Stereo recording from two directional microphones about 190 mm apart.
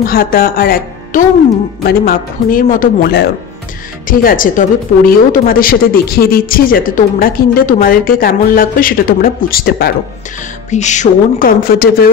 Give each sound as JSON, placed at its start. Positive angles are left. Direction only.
{"t": 0.0, "sound": "a woman's voice", "side_deg": 50}
{"t": 10.7, "sound": "a woman's voice", "side_deg": 40}